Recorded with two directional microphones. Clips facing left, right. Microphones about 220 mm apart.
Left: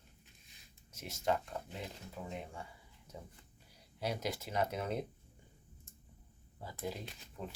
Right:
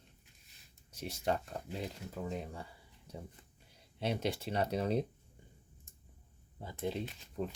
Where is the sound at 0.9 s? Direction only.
35° right (ahead or behind).